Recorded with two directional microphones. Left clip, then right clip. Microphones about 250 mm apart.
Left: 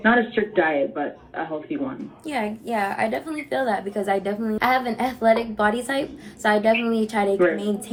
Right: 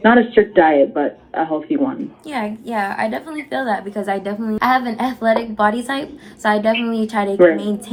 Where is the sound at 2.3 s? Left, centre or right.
Centre.